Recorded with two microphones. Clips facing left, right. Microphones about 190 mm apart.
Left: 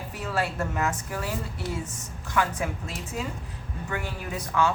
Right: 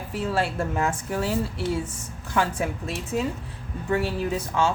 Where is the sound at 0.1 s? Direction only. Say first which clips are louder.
Right 4 dB; 30° right (ahead or behind).